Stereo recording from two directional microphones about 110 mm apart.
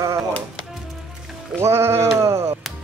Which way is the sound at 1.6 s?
25° right (ahead or behind).